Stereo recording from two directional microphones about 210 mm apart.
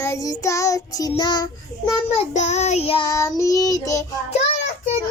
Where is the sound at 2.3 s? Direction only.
35° left (ahead or behind); by 4.0 s 15° left (ahead or behind).